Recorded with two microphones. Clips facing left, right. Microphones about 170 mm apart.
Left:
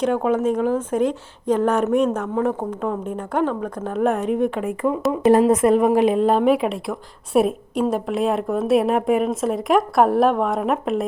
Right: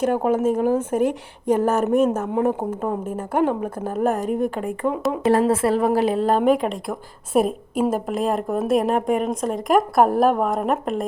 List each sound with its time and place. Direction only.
0.0 s a woman's voice: 10° right (ahead or behind)
2.2 s a woman's voice: 15° right (ahead or behind); by 5.2 s centre (ahead or behind)
5.2 s a woman's voice: 20° left (ahead or behind)
6.0 s a woman's voice: 35° right (ahead or behind)
6.2 s a woman's voice: 5° left (ahead or behind)